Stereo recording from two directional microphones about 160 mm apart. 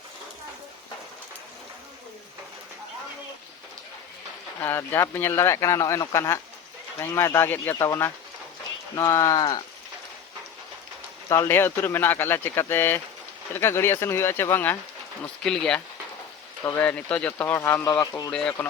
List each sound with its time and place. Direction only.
4.6 s speech: 15° left (ahead or behind)
11.3 s speech: 15° left (ahead or behind)
18.0 s speech: 20° left (ahead or behind)
18.3 s speech: 5° left (ahead or behind)